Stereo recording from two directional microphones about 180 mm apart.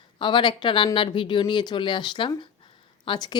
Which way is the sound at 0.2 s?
25° left (ahead or behind).